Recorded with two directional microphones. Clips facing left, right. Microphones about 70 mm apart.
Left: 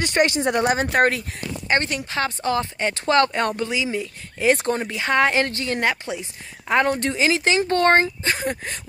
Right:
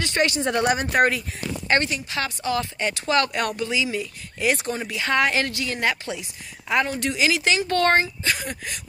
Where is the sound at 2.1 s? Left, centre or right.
Left.